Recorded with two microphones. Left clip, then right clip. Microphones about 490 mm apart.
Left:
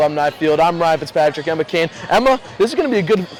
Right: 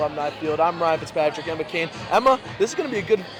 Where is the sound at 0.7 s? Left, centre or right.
Left.